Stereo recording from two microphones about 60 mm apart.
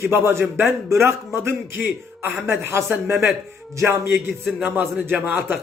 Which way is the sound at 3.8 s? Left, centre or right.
Right.